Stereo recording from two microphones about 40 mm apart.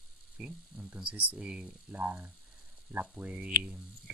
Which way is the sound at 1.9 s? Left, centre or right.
Right.